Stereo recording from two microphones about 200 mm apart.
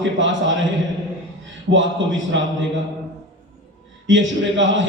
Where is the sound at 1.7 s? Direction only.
70° right (ahead or behind).